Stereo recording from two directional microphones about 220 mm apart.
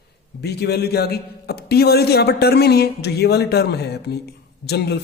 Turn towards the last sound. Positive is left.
turn(degrees=50)  # may be behind; listen again after turning